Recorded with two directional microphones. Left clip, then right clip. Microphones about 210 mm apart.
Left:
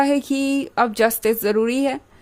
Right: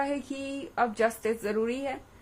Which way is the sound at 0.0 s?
50° left (ahead or behind).